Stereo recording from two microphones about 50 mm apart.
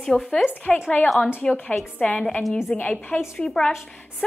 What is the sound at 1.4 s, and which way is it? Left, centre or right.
A woman's voice, left.